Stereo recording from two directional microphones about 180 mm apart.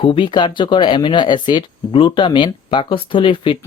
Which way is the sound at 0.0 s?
30° left (ahead or behind).